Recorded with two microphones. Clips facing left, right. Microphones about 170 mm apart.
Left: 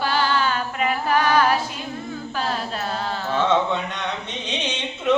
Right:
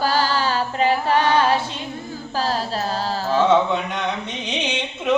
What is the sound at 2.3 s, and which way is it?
Carnatic music, 35° right (ahead or behind).